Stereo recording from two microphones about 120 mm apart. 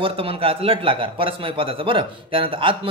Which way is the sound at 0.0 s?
50° right (ahead or behind).